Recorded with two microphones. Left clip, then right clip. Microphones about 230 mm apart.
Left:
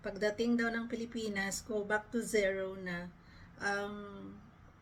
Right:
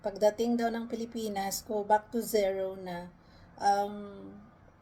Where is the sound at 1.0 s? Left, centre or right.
Right.